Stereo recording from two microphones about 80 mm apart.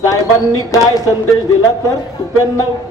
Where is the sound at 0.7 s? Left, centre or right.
Left.